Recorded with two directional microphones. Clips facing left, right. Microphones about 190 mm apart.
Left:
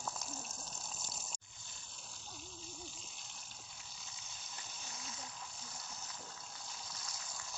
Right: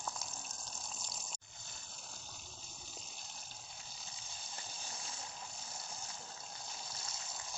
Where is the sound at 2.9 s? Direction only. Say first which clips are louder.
Right 3 dB; 40° right (ahead or behind).